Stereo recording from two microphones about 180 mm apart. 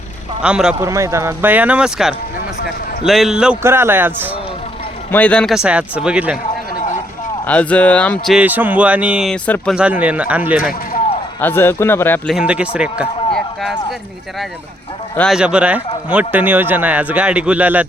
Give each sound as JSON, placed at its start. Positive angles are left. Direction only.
{"t": 0.4, "sound": "speech", "side_deg": -5}
{"t": 0.8, "sound": "a man's voice", "side_deg": -15}
{"t": 5.1, "sound": "speech", "side_deg": 5}
{"t": 7.4, "sound": "speech", "side_deg": 5}
{"t": 9.8, "sound": "a man's voice", "side_deg": -10}
{"t": 11.3, "sound": "speech", "side_deg": 10}
{"t": 12.3, "sound": "a man's voice", "side_deg": -5}
{"t": 15.1, "sound": "speech", "side_deg": 5}
{"t": 15.4, "sound": "a man's voice", "side_deg": -5}